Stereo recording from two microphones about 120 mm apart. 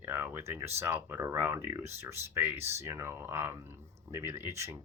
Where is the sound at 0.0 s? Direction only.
20° right (ahead or behind).